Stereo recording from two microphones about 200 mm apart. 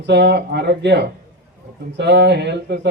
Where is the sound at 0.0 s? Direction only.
55° right (ahead or behind).